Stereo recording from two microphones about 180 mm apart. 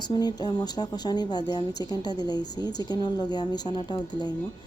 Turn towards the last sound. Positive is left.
turn(degrees=25)  # may be behind; listen again after turning